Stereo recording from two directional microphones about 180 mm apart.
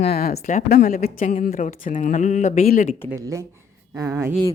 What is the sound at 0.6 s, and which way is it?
Speech, 60° left (ahead or behind).